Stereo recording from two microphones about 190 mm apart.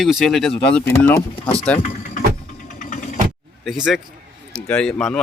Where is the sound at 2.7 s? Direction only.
45° left (ahead or behind).